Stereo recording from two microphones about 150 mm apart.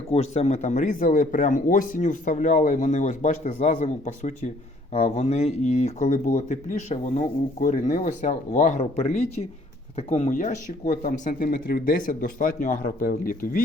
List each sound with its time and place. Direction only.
0.1 s speech: 45° left (ahead or behind); by 11.3 s 65° left (ahead or behind)
11.3 s speech: 80° left